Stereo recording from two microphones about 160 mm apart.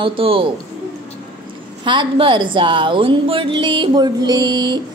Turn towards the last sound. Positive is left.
turn(degrees=-25)  # may be behind; listen again after turning